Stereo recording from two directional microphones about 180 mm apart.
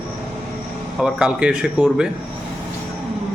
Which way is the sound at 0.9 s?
5° right (ahead or behind).